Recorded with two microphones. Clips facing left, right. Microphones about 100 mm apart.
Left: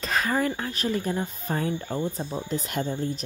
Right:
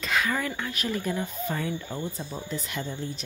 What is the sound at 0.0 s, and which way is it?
Speech, 35° left (ahead or behind).